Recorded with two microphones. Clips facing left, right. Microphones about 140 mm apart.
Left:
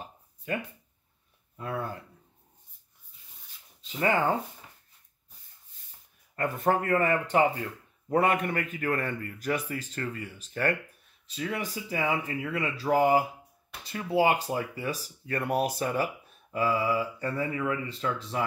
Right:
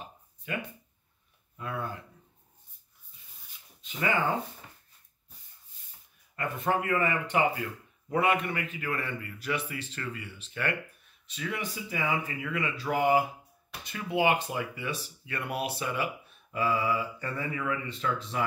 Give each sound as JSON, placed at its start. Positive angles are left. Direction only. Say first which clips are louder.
{"t": 0.5, "sound": "speech", "louder": "left 3 dB", "side_deg": 35}
{"t": 6.3, "sound": "speech", "louder": "left 3 dB", "side_deg": 45}